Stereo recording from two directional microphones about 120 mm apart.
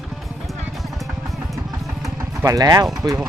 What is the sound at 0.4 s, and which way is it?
Music, centre (ahead or behind).